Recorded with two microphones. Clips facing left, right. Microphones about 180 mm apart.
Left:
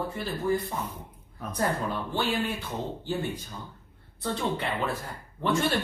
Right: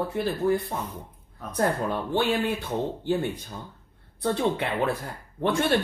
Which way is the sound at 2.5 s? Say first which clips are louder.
Right 5 dB; 60° right (ahead or behind).